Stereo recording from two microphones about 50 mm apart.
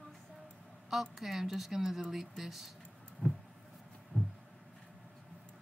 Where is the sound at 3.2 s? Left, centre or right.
Left.